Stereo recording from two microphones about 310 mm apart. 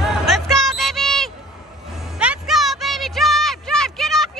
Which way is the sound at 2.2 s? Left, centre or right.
Centre.